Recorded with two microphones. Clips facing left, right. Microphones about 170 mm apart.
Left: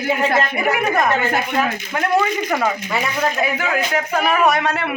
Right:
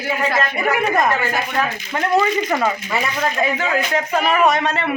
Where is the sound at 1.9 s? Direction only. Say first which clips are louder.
Right 2 dB; 5° left (ahead or behind).